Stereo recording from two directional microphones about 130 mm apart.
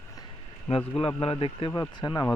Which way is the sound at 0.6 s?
45° left (ahead or behind).